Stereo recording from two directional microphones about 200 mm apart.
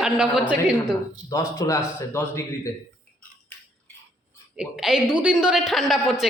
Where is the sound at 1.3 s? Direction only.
15° left (ahead or behind).